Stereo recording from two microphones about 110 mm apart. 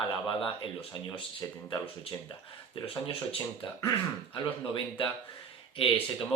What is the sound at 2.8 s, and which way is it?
Speech, 55° left (ahead or behind).